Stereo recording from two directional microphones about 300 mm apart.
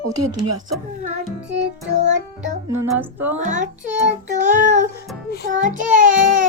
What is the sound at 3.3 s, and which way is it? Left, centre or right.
Child singing, right.